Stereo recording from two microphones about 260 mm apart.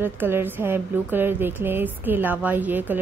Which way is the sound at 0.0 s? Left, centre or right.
Centre.